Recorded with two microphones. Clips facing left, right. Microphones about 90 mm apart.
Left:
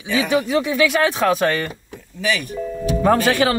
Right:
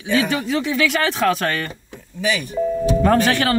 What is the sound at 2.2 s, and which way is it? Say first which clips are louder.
Speech: right 2 dB; 25° right (ahead or behind).